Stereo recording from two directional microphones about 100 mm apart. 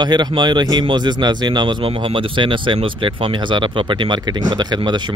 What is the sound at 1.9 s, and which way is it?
Speech, 65° right (ahead or behind).